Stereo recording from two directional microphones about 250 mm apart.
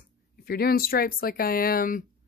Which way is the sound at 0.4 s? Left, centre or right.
Left.